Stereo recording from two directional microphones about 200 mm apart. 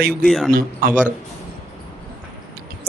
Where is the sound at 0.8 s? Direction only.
45° right (ahead or behind).